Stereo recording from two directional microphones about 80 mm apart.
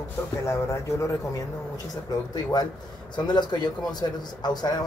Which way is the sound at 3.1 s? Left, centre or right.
Left.